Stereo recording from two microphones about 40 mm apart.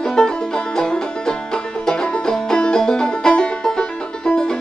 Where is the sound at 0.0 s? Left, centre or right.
Centre.